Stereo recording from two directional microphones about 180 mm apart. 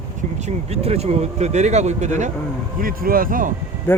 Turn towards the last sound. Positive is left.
turn(degrees=10)  # may be behind; listen again after turning